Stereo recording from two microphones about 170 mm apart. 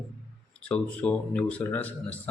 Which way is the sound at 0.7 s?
10° left (ahead or behind).